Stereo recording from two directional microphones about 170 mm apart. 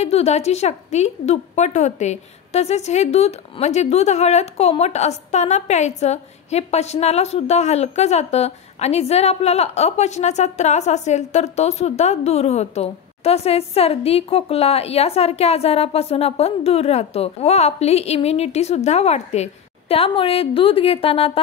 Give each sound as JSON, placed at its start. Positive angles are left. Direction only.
{"t": 0.0, "sound": "a woman's voice", "side_deg": 40}